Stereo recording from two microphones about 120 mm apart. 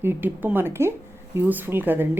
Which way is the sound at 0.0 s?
15° right (ahead or behind).